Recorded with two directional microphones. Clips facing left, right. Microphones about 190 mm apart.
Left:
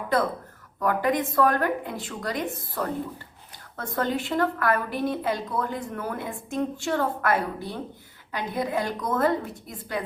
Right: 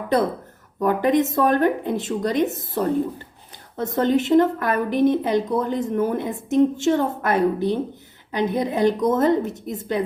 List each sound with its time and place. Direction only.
0.8 s a woman's voice: 20° right (ahead or behind)